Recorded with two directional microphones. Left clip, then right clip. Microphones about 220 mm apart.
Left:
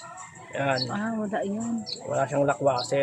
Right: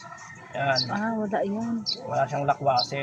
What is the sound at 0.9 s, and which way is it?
Speech, centre (ahead or behind).